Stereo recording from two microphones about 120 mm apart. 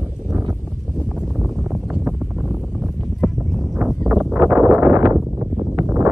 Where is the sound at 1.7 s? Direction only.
5° right (ahead or behind).